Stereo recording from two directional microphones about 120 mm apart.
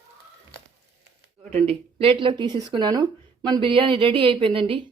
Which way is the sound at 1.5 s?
55° right (ahead or behind).